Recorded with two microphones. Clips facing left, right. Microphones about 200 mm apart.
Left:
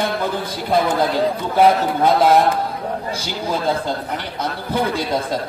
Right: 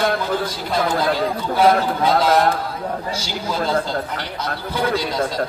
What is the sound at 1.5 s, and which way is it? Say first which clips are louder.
Speech: left 1 dB; 55° left (ahead or behind).